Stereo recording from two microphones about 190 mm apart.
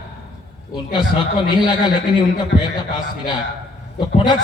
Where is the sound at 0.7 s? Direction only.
25° left (ahead or behind).